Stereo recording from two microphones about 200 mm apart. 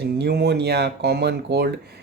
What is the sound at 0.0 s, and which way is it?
Speech, 55° right (ahead or behind).